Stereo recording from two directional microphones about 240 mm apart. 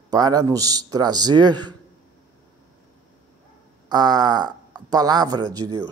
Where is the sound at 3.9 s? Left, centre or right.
Centre.